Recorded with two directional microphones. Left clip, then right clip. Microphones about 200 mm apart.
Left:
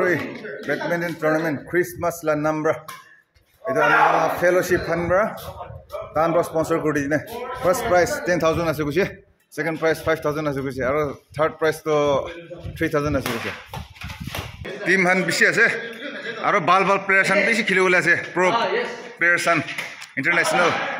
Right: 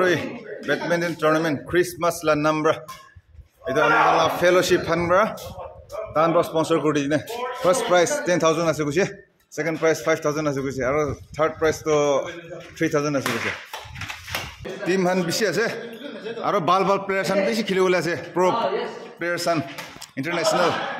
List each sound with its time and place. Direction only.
0.7 s a man's voice: 5° right (ahead or behind)
14.9 s a man's voice: 15° right (ahead or behind)